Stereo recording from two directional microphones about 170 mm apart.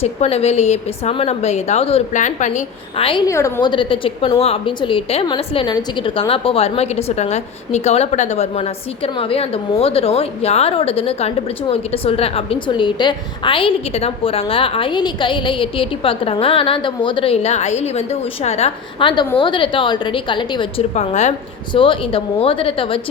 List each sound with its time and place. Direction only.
0.0 s a woman's voice: 35° left (ahead or behind)
3.1 s a woman's voice: 25° left (ahead or behind)
20.9 s a woman's voice: 40° left (ahead or behind)
21.7 s a woman's voice: 30° left (ahead or behind)